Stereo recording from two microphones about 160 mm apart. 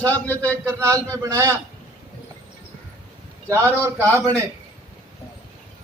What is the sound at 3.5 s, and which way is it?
Speech, 20° right (ahead or behind).